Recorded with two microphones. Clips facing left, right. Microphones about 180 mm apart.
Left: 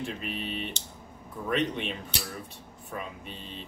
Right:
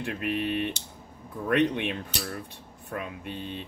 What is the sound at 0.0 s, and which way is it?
Speech, 65° right (ahead or behind).